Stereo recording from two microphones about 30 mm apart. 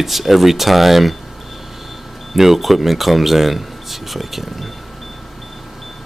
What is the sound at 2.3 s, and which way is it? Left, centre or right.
Speech, centre.